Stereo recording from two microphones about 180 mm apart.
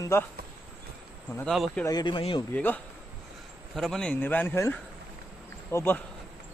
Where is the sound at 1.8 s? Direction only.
25° left (ahead or behind).